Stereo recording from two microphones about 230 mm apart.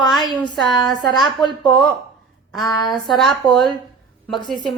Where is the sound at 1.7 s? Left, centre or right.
Centre.